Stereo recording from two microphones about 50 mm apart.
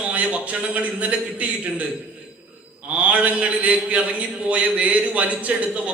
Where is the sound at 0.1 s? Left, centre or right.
Right.